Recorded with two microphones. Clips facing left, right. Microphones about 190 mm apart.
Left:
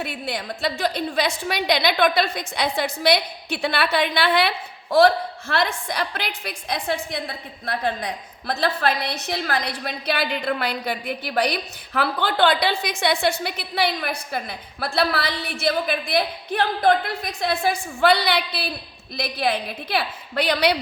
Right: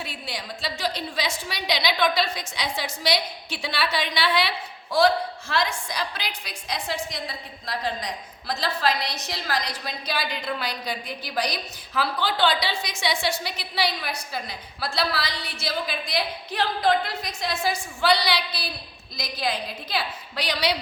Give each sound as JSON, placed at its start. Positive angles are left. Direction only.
{"t": 0.0, "sound": "a woman's voice", "side_deg": 55}